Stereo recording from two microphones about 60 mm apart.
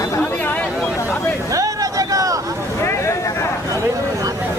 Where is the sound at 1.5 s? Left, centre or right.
Right.